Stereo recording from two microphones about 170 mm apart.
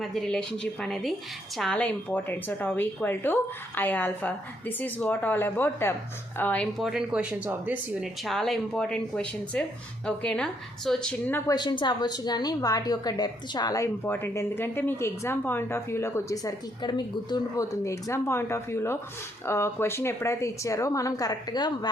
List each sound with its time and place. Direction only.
0.0 s a woman's voice: centre (ahead or behind)
8.2 s speech: centre (ahead or behind)
11.5 s a woman's voice: 25° left (ahead or behind)